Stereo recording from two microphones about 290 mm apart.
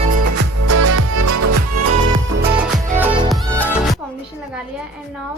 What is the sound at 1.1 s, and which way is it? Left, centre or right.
Music, right.